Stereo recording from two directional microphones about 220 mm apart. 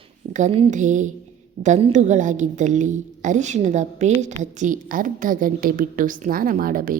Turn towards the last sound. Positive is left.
turn(degrees=-40)  # may be behind; listen again after turning